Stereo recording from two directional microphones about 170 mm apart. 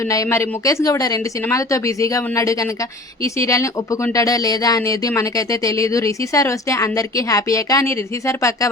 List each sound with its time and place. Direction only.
0.1 s speech: 15° left (ahead or behind)